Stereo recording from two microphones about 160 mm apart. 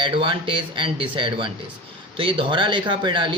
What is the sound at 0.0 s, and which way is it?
Speech, 30° right (ahead or behind).